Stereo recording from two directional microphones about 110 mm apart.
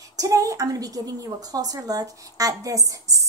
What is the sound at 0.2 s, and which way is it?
A woman's voice, 30° right (ahead or behind).